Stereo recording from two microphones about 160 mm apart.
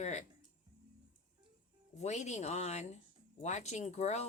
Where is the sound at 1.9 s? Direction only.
45° left (ahead or behind).